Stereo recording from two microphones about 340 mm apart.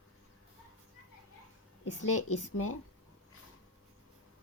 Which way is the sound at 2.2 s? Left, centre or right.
Left.